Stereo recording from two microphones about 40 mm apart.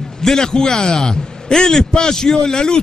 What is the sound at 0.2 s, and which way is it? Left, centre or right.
A man's voice, centre.